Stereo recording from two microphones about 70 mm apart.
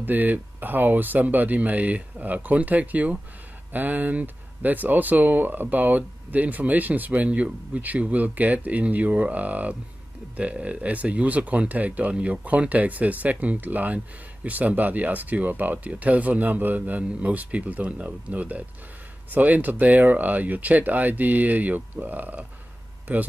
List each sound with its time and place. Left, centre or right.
0.0 s speech: right